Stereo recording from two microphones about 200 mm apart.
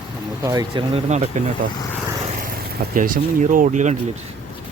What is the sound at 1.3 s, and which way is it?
Speech, 40° right (ahead or behind).